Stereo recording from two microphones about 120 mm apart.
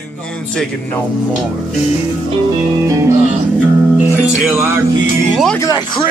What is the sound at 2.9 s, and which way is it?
Music, 25° right (ahead or behind).